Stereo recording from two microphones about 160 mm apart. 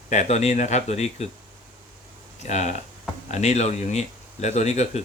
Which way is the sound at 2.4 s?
45° left (ahead or behind).